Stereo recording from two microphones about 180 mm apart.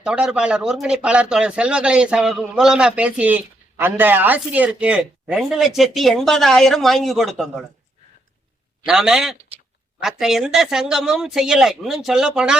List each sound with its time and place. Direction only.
0.0 s speech: 5° right (ahead or behind)
8.9 s speech: 5° right (ahead or behind)